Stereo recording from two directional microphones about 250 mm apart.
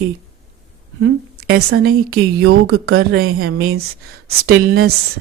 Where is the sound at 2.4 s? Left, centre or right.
Right.